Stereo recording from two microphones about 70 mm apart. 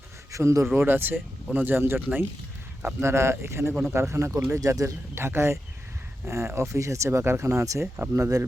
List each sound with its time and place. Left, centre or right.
0.3 s speech: right
0.8 s speech: right
5.1 s speech: right